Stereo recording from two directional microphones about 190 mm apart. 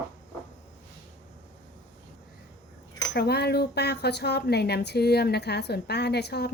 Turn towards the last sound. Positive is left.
turn(degrees=60)  # may be behind; listen again after turning